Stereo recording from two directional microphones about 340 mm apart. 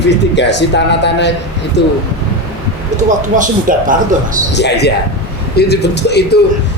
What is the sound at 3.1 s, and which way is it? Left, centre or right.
Speech, right.